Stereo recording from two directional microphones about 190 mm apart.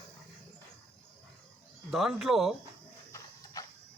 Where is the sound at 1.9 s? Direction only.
Centre (ahead or behind).